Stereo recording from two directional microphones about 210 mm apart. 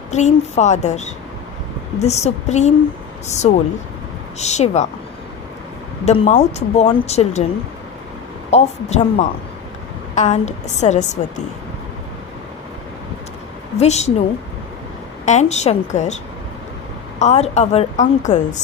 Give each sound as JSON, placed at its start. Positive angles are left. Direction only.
{"t": 0.1, "sound": "a woman's voice", "side_deg": 35}
{"t": 6.1, "sound": "a woman's voice", "side_deg": 30}
{"t": 8.4, "sound": "a woman's voice", "side_deg": 30}
{"t": 13.7, "sound": "a woman's voice", "side_deg": 30}
{"t": 15.2, "sound": "a woman's voice", "side_deg": 35}
{"t": 17.2, "sound": "a woman's voice", "side_deg": 30}